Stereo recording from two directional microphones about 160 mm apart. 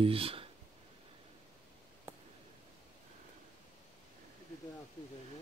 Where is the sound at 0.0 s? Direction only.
35° right (ahead or behind).